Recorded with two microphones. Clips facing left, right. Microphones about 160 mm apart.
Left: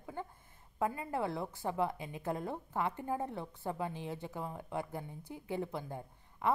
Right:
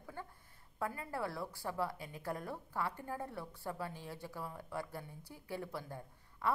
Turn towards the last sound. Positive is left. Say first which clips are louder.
# left 4 dB
turn(degrees=20)  # may be behind; listen again after turning